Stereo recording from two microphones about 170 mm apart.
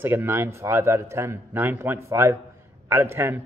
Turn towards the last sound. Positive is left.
turn(degrees=-15)  # may be behind; listen again after turning